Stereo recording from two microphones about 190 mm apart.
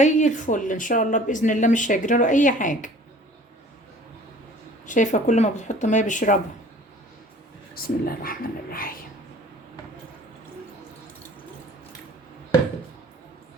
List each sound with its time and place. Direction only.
0.0 s speech: 40° left (ahead or behind)
4.9 s speech: 40° left (ahead or behind)
7.8 s speech: 50° left (ahead or behind)